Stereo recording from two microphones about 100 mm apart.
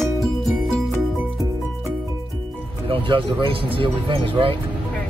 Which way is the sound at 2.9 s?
60° right (ahead or behind).